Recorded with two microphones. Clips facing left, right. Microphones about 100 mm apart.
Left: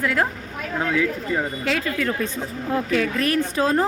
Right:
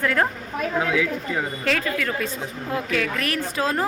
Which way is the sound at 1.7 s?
20° left (ahead or behind).